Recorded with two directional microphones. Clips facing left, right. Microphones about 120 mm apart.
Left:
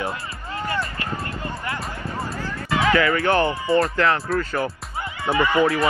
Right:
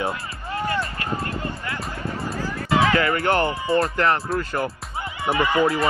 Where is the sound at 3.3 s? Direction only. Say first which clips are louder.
Left 2 dB; 20° left (ahead or behind).